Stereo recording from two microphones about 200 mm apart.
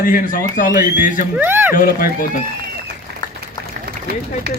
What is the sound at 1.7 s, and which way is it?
Speech, 45° left (ahead or behind).